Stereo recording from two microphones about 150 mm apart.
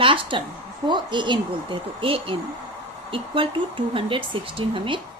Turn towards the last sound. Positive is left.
turn(degrees=-35)  # may be behind; listen again after turning